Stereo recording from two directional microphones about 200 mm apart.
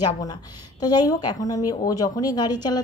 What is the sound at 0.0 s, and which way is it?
A woman's voice, 20° left (ahead or behind).